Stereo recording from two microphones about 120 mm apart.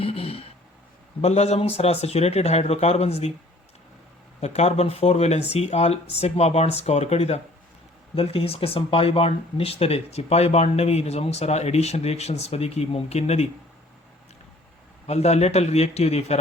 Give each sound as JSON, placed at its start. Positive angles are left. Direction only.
{"t": 0.0, "sound": "a sound", "side_deg": 55}
{"t": 1.2, "sound": "speech", "side_deg": 60}
{"t": 4.4, "sound": "speech", "side_deg": 65}
{"t": 8.1, "sound": "speech", "side_deg": 50}
{"t": 15.0, "sound": "speech", "side_deg": 65}